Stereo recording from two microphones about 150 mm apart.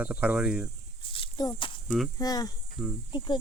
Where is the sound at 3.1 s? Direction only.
30° left (ahead or behind).